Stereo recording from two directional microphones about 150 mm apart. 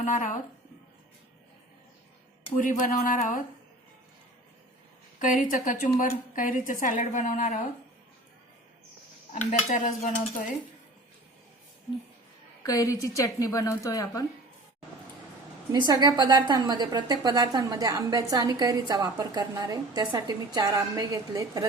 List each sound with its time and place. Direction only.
0.0 s a woman's voice: 60° left (ahead or behind)
2.6 s a woman's voice: 65° left (ahead or behind)
5.2 s a woman's voice: 60° left (ahead or behind)
9.3 s a woman's voice: 55° left (ahead or behind)
12.6 s a woman's voice: 20° left (ahead or behind)
15.9 s a woman's voice: 25° right (ahead or behind)